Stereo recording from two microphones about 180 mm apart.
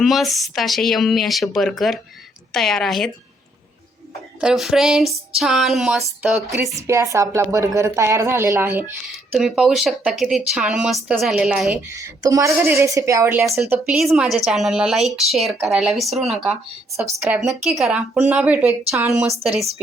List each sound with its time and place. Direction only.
0.0 s a woman's voice: centre (ahead or behind)
4.4 s a woman's voice: 5° right (ahead or behind)
6.7 s a woman's voice: 15° right (ahead or behind)
9.1 s a woman's voice: centre (ahead or behind)
11.9 s a woman's voice: 20° right (ahead or behind)